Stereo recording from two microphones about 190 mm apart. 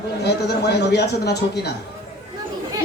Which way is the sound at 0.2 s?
60° left (ahead or behind).